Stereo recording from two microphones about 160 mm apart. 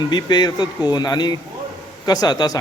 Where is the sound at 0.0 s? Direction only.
25° left (ahead or behind).